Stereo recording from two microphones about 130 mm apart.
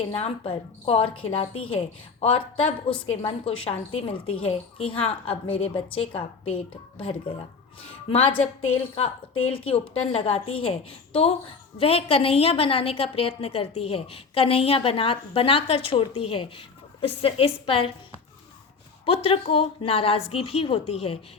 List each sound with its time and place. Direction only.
0.0 s a woman's voice: 50° left (ahead or behind)
9.5 s a woman's voice: 45° left (ahead or behind)
19.0 s a woman's voice: 45° left (ahead or behind)